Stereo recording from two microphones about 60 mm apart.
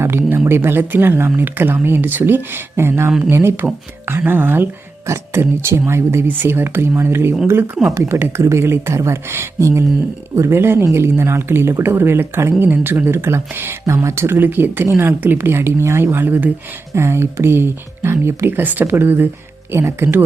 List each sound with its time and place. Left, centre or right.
0.0 s speech: right
5.0 s speech: right
13.8 s speech: right